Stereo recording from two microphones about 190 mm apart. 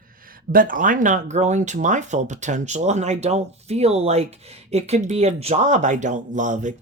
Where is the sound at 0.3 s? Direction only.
45° right (ahead or behind).